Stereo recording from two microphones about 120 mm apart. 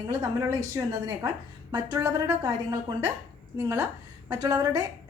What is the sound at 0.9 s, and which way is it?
Speech, 30° right (ahead or behind).